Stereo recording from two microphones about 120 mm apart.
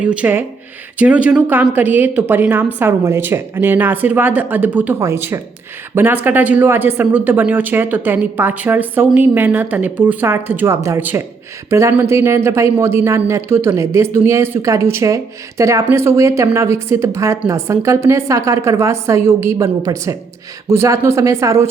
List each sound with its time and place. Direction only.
0.0 s a woman's voice: 10° right (ahead or behind)